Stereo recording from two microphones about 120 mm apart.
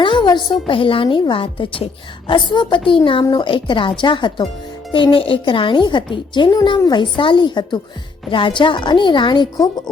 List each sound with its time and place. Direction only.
0.0 s music: 40° left (ahead or behind)
0.7 s a woman's voice: 45° left (ahead or behind)